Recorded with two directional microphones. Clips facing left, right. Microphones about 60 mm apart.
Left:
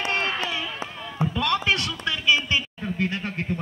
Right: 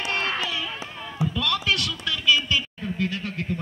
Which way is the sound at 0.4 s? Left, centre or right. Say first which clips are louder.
Even; left.